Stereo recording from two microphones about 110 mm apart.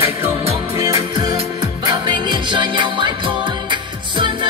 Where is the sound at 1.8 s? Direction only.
45° right (ahead or behind).